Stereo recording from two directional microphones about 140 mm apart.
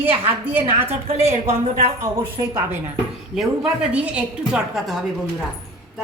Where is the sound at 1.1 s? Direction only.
50° right (ahead or behind).